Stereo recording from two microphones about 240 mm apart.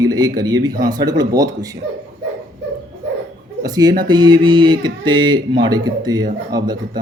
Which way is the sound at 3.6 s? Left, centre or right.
Centre.